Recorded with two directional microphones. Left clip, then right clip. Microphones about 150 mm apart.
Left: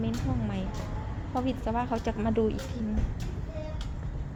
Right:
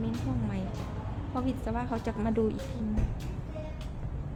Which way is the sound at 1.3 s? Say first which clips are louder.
Left 3 dB; 5° left (ahead or behind).